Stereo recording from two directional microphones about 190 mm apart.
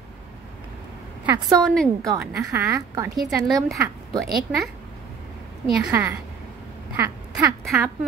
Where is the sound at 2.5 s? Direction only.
15° right (ahead or behind).